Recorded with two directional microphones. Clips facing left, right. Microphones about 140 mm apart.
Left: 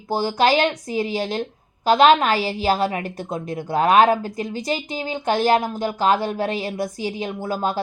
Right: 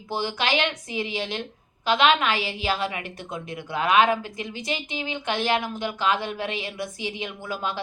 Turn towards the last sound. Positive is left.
turn(degrees=40)  # may be behind; listen again after turning